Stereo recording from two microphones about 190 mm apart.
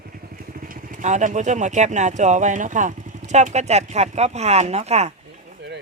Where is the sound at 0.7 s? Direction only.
45° right (ahead or behind).